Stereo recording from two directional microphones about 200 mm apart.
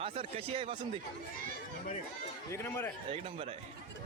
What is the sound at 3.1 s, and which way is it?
Speech, 30° right (ahead or behind).